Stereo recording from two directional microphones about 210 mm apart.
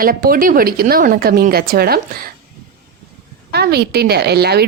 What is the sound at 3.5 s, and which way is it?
A woman's voice, 50° right (ahead or behind).